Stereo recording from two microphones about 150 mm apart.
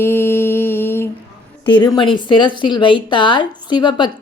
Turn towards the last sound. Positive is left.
turn(degrees=30)  # may be behind; listen again after turning